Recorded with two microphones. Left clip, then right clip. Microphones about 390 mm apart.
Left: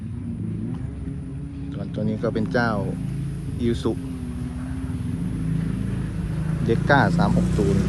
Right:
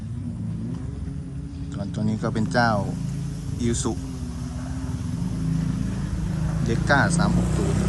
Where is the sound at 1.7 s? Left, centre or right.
Centre.